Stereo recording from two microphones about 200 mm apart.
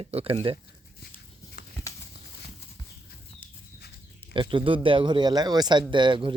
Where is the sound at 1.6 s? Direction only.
50° left (ahead or behind).